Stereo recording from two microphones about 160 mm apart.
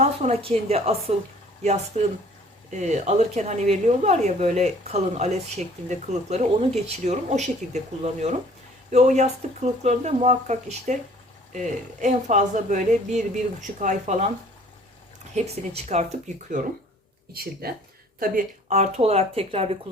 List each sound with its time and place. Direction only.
0.0 s speech: 40° right (ahead or behind)
15.7 s speech: 45° right (ahead or behind)
17.3 s speech: 70° right (ahead or behind)
18.2 s speech: 55° right (ahead or behind); by 19.7 s 35° right (ahead or behind)